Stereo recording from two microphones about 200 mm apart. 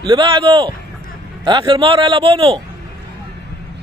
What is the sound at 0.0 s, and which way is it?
Speech, 25° right (ahead or behind).